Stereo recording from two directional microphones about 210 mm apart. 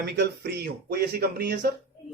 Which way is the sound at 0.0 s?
50° right (ahead or behind).